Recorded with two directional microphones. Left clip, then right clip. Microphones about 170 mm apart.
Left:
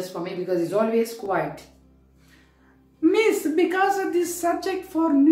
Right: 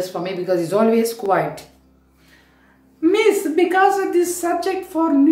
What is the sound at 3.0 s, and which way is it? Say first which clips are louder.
A woman's voice: right 4 dB; 5° left (ahead or behind).